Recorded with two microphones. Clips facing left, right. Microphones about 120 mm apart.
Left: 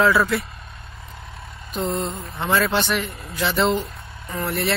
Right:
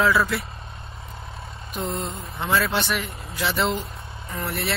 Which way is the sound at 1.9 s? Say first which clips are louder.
Left 4 dB; centre (ahead or behind).